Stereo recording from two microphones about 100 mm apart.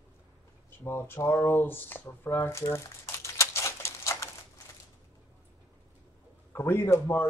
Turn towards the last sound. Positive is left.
turn(degrees=25)  # may be behind; listen again after turning